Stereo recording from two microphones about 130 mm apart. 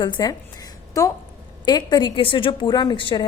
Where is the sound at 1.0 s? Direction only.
25° left (ahead or behind).